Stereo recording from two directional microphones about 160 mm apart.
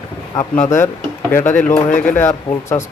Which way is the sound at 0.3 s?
25° left (ahead or behind).